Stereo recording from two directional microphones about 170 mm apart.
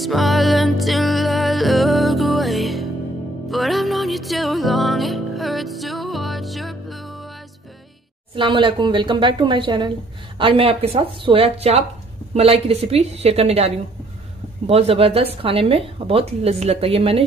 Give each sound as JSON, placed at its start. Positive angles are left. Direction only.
{"t": 0.0, "sound": "music", "side_deg": 0}
{"t": 8.4, "sound": "a woman's voice", "side_deg": -30}